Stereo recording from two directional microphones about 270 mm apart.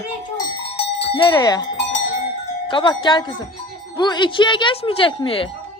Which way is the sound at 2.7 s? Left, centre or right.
Centre.